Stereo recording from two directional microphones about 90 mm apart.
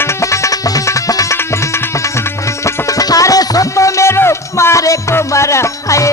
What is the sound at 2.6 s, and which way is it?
Music, 40° left (ahead or behind).